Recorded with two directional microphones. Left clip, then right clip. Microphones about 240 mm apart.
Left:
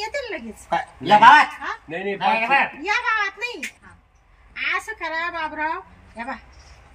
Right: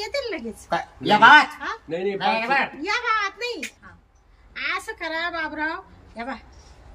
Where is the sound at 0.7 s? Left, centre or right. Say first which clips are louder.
Left 4 dB; centre.